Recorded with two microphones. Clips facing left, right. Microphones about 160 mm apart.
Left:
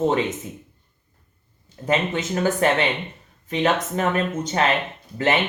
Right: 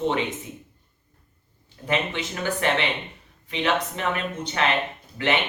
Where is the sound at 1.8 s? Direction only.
40° left (ahead or behind).